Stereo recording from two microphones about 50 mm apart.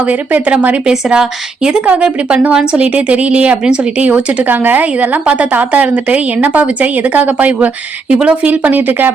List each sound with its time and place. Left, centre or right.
0.0 s a woman's voice: right
1.0 s a woman's voice: centre; by 9.0 s right